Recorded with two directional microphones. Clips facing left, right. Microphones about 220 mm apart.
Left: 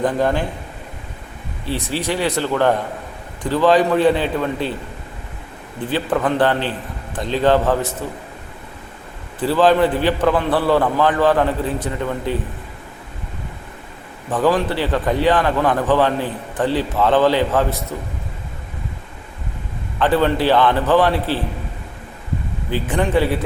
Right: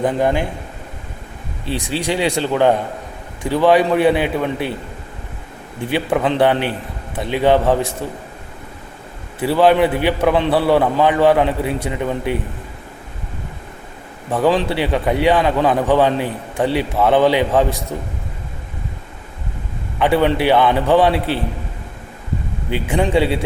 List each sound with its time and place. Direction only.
0.0 s a man's voice: 15° right (ahead or behind)
1.6 s a man's voice: 15° right (ahead or behind)
5.9 s a man's voice: 15° right (ahead or behind)
9.4 s a man's voice: 10° right (ahead or behind)
14.3 s a man's voice: 10° right (ahead or behind)
20.0 s a man's voice: 15° right (ahead or behind)
22.9 s a man's voice: 15° right (ahead or behind)